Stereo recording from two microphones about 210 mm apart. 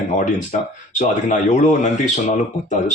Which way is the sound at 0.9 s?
35° left (ahead or behind).